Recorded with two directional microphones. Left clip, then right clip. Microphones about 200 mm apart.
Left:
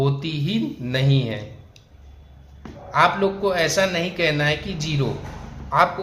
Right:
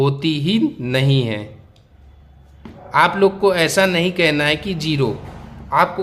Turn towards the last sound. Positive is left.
turn(degrees=-35)  # may be behind; listen again after turning